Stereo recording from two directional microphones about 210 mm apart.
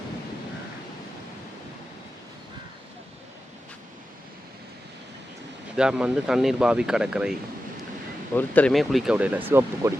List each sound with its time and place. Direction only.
5.7 s speech: 5° right (ahead or behind)
8.4 s speech: 5° left (ahead or behind); by 9.9 s 10° right (ahead or behind)